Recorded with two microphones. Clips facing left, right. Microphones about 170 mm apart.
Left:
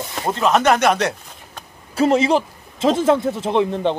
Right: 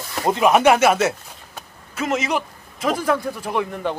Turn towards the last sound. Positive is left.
turn(degrees=25)  # may be behind; listen again after turning